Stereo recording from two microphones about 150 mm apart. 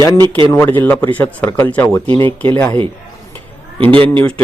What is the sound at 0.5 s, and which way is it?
Speech, 15° left (ahead or behind).